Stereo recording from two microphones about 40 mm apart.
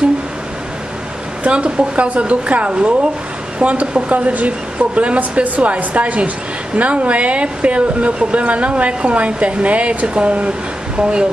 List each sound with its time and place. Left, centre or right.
1.4 s speech: right